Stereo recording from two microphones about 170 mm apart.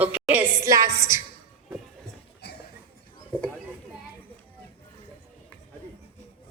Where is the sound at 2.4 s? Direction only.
80° left.